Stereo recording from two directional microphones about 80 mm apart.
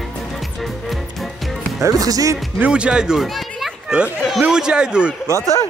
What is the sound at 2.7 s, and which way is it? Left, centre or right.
Speech, centre.